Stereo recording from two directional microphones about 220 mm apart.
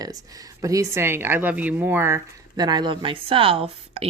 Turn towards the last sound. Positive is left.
turn(degrees=-25)  # may be behind; listen again after turning